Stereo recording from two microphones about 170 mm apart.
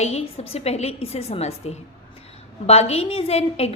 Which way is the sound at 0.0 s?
40° left (ahead or behind).